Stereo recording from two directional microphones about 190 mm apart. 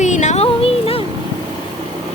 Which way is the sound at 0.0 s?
40° left (ahead or behind).